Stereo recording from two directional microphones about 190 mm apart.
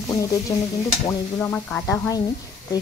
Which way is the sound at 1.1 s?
10° left (ahead or behind).